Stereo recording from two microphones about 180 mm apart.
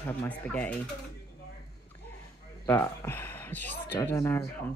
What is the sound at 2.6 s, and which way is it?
Speech, 15° left (ahead or behind).